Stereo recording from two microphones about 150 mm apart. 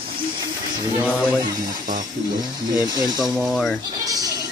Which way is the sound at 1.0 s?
10° right (ahead or behind).